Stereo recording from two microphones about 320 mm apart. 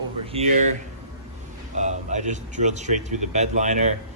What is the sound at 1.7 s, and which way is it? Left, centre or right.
Speech, right.